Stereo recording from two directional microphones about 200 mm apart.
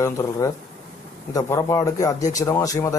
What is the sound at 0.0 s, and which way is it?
A man's voice, 15° left (ahead or behind).